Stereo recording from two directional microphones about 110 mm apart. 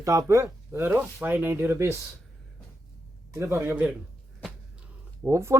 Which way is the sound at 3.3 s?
25° right (ahead or behind).